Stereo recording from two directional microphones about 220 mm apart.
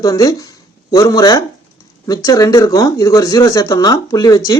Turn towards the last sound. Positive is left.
turn(degrees=15)  # may be behind; listen again after turning